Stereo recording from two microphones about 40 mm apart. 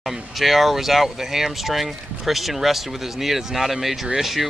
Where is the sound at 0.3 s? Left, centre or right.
Centre.